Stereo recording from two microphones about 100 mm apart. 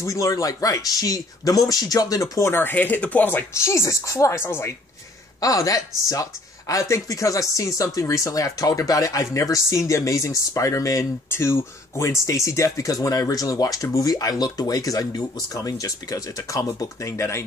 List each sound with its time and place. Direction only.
0.0 s speech: 35° left (ahead or behind)
5.4 s speech: 35° left (ahead or behind)